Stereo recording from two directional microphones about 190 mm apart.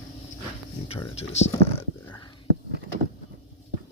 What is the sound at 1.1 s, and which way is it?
Speech, 35° left (ahead or behind).